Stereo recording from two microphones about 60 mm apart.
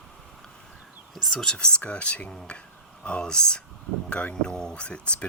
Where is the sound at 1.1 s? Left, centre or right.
Centre.